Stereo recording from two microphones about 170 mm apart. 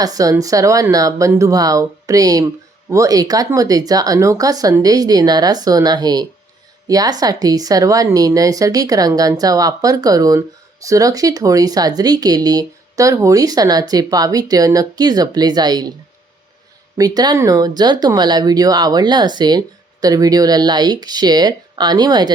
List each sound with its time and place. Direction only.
0.0 s speech: 20° right (ahead or behind)
17.0 s speech: 20° right (ahead or behind)